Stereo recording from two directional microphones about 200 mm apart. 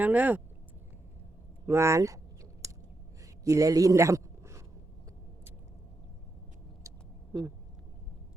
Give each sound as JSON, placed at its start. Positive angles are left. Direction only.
{"t": 0.0, "sound": "speech", "side_deg": -10}
{"t": 1.6, "sound": "speech", "side_deg": -15}
{"t": 2.6, "sound": "a sound", "side_deg": -15}
{"t": 3.4, "sound": "a man's voice", "side_deg": -15}